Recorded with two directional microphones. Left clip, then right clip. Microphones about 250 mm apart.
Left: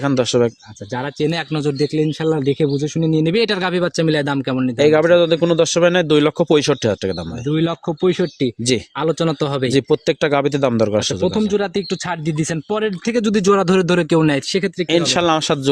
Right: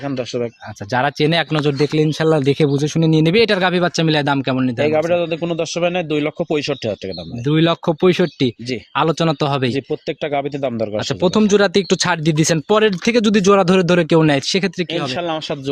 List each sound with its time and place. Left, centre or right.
0.0 s a man's voice: left
0.9 s speech: right
4.8 s a man's voice: left
7.4 s speech: centre
9.7 s speech: left
11.2 s speech: right
14.8 s speech: left